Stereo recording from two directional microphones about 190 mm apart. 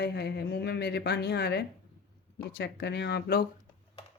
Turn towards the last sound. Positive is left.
turn(degrees=60)  # may be behind; listen again after turning